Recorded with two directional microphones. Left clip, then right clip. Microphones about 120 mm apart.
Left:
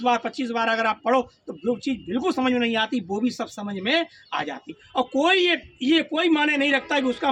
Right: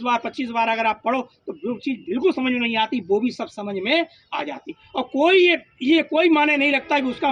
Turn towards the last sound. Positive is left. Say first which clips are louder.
# right 2 dB
turn(degrees=30)  # may be behind; listen again after turning